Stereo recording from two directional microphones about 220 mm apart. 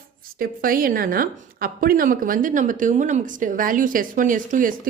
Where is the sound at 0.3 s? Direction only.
40° right (ahead or behind).